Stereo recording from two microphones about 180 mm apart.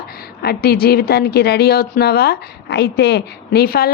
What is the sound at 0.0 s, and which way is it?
A woman's voice, 60° left (ahead or behind).